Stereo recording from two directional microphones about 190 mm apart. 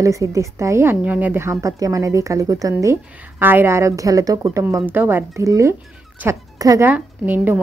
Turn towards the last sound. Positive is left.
turn(degrees=-10)  # may be behind; listen again after turning